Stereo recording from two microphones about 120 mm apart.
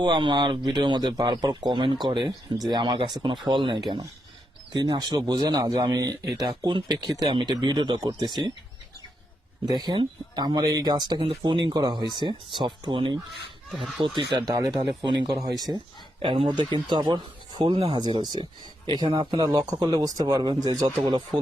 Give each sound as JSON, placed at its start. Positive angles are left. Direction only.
{"t": 0.0, "sound": "speech", "side_deg": -40}
{"t": 9.6, "sound": "speech", "side_deg": -35}
{"t": 13.7, "sound": "speech", "side_deg": 0}
{"t": 14.0, "sound": "speech", "side_deg": -45}
{"t": 16.2, "sound": "speech", "side_deg": -45}